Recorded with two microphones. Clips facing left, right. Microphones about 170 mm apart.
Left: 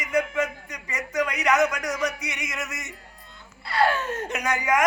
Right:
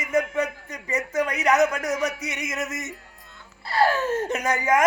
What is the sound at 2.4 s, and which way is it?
A man's voice, 45° right (ahead or behind).